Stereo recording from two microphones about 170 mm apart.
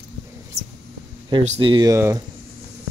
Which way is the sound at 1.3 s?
30° right (ahead or behind).